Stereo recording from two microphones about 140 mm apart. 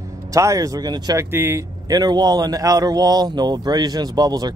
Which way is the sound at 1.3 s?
15° right (ahead or behind).